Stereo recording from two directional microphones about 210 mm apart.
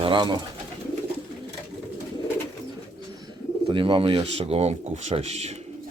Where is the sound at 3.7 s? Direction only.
25° right (ahead or behind).